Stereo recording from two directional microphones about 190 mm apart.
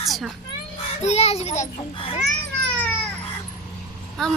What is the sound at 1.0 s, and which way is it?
Speech, 35° left (ahead or behind).